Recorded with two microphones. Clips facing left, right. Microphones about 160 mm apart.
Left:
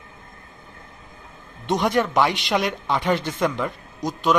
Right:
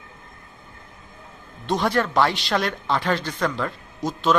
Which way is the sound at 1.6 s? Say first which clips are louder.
Left 1 dB; 20° left (ahead or behind).